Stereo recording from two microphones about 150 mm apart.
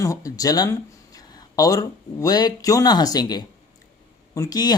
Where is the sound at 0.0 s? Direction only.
20° left (ahead or behind).